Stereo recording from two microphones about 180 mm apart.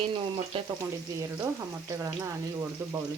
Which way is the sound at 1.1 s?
20° right (ahead or behind).